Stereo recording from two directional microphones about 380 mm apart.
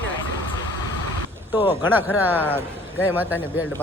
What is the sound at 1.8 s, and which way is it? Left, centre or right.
Speech, centre.